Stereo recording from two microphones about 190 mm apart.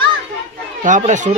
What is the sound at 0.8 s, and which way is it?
Speech, 40° right (ahead or behind).